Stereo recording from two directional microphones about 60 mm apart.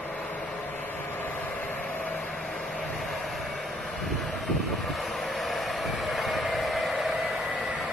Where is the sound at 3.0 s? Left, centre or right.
Centre.